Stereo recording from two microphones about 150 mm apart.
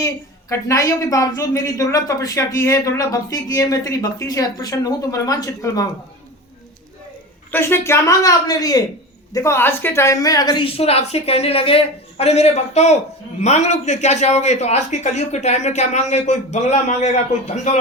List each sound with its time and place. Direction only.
0.0 s a woman's voice: 20° left (ahead or behind)
7.5 s a woman's voice: 15° left (ahead or behind); by 17.7 s 50° left (ahead or behind)